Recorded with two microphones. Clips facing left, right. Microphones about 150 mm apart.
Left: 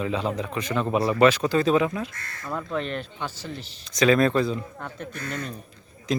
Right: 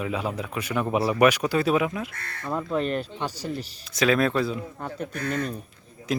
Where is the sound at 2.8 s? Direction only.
40° right (ahead or behind).